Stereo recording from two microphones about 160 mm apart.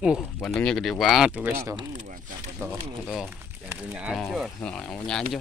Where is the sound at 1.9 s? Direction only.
50° right (ahead or behind).